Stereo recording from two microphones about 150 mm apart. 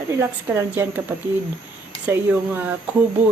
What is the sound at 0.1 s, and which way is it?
Speech, 20° right (ahead or behind).